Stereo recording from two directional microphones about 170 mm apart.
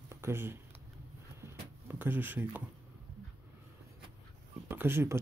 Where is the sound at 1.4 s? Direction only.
10° right (ahead or behind).